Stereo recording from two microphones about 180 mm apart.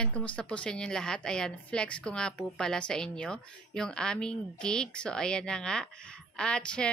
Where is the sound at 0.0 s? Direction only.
5° left (ahead or behind).